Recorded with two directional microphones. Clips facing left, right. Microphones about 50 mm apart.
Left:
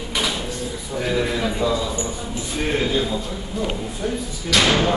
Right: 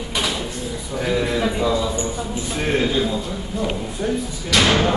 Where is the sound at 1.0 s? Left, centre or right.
Centre.